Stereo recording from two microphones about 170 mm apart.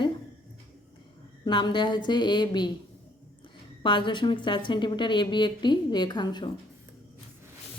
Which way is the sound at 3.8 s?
30° left (ahead or behind).